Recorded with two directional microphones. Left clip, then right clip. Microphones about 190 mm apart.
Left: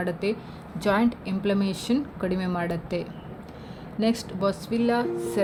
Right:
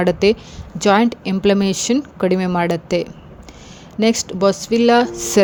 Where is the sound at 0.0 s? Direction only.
50° right (ahead or behind).